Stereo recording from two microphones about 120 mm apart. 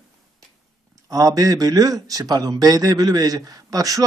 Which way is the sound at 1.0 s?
30° right (ahead or behind).